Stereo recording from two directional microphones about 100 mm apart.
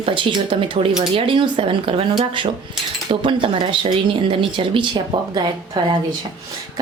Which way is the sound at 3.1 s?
60° right (ahead or behind).